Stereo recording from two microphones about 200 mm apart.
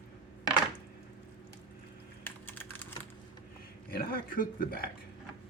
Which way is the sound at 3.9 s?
45° left (ahead or behind).